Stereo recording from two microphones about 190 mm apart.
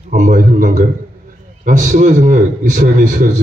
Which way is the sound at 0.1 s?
40° right (ahead or behind).